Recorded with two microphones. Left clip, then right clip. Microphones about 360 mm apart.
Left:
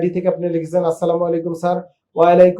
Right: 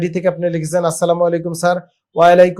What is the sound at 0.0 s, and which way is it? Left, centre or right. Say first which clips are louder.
Speech: right 1 dB; right.